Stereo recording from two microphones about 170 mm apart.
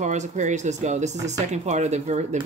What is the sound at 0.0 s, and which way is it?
Speech, 45° right (ahead or behind).